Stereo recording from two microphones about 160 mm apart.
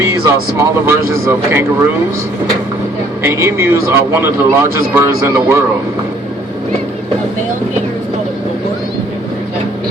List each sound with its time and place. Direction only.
0.0 s a man's voice: 20° right (ahead or behind)
3.2 s a man's voice: 15° right (ahead or behind)